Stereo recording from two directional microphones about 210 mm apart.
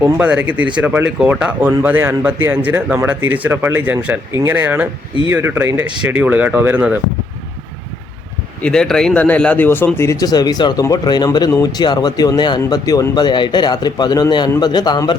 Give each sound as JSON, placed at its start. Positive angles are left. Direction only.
{"t": 0.0, "sound": "speech", "side_deg": -5}
{"t": 8.6, "sound": "speech", "side_deg": 5}